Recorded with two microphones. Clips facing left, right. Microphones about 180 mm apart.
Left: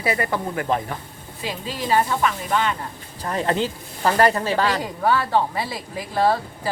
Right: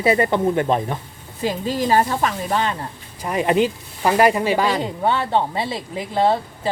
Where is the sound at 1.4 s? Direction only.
45° right (ahead or behind).